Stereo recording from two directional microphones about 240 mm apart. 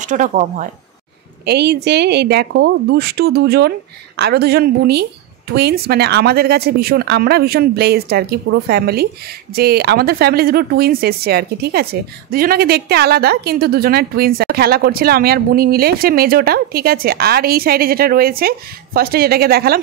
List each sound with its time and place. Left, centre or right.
0.0 s speech: right
1.4 s a woman's voice: right